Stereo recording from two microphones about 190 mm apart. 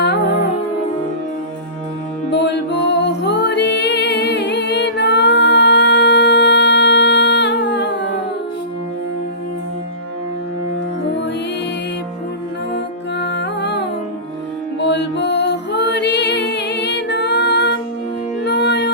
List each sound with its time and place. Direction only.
2.3 s music: 65° left (ahead or behind)
12.7 s music: 65° left (ahead or behind)